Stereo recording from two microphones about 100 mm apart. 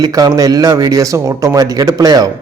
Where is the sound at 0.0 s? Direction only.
40° right (ahead or behind).